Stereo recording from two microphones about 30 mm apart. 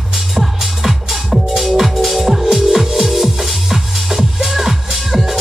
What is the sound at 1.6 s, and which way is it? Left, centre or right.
Music, centre.